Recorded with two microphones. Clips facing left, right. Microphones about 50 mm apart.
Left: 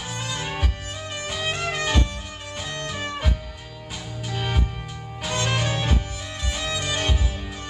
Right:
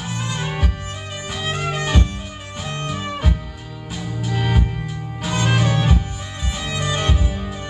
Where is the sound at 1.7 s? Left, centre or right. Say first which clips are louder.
Right 3 dB; centre.